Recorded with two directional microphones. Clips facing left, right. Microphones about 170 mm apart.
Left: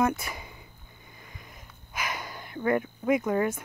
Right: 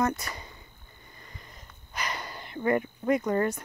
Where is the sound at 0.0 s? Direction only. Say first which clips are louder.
Left 2 dB; 10° left (ahead or behind).